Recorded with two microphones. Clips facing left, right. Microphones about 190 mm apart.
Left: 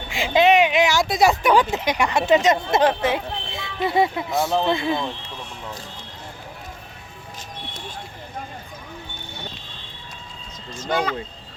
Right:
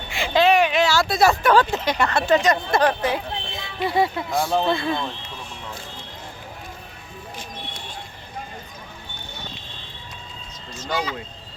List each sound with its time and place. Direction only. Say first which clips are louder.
0.3 s speech: left 1 dB; 20° left (ahead or behind)
4.3 s speech: even; centre (ahead or behind)
4.7 s speech: left 1 dB; 20° left (ahead or behind)
10.8 s speech: left 3 dB; 55° left (ahead or behind)